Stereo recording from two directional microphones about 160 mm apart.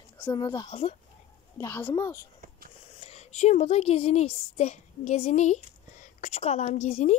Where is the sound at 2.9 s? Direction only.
40° left (ahead or behind).